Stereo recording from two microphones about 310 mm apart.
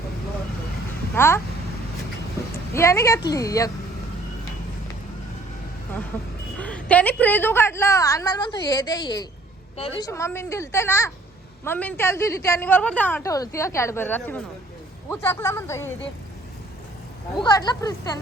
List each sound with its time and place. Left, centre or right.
1.1 s speech: centre
2.7 s a woman's voice: centre
6.6 s a woman's voice: centre
17.3 s a woman's voice: centre